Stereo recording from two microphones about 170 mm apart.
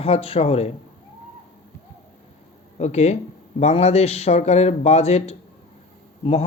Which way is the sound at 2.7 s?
40° left (ahead or behind).